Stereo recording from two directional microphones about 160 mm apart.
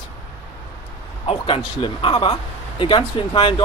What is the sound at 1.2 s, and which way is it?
Speech, 35° left (ahead or behind).